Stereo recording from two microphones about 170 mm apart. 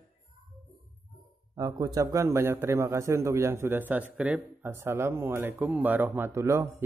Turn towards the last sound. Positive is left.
turn(degrees=-15)  # may be behind; listen again after turning